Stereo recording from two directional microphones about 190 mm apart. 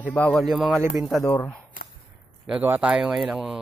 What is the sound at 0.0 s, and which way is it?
Speech, 10° left (ahead or behind).